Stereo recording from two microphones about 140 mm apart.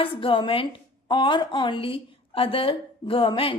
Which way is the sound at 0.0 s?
40° left (ahead or behind).